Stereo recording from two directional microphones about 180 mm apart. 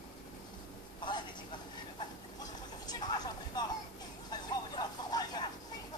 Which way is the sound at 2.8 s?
25° left (ahead or behind).